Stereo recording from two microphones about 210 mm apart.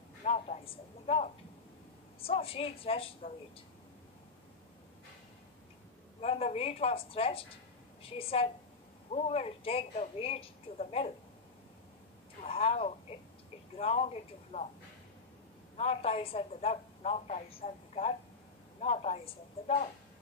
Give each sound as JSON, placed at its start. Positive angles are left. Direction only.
{"t": 0.2, "sound": "a man's voice", "side_deg": 30}
{"t": 6.2, "sound": "a woman's voice", "side_deg": 30}
{"t": 12.4, "sound": "a sound", "side_deg": 30}
{"t": 13.7, "sound": "speech", "side_deg": 30}
{"t": 15.7, "sound": "a woman's voice", "side_deg": 30}